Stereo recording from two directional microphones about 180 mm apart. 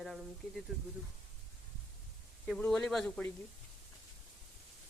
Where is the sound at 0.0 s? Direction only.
Centre (ahead or behind).